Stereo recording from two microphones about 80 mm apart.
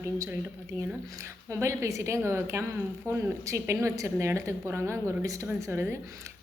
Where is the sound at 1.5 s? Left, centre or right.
Right.